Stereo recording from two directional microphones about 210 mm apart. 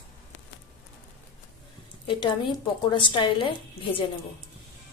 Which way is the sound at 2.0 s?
25° left (ahead or behind).